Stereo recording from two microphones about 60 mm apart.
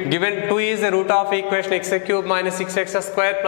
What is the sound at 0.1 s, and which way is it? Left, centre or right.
A man's voice, centre.